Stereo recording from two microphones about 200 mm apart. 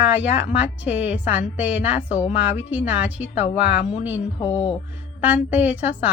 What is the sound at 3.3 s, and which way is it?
Speech, 35° left (ahead or behind).